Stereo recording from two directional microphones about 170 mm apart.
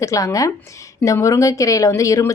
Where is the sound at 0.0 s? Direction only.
20° left (ahead or behind).